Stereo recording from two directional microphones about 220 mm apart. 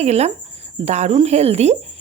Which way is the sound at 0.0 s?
30° right (ahead or behind).